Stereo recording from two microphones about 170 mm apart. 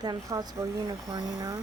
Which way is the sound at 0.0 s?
20° right (ahead or behind).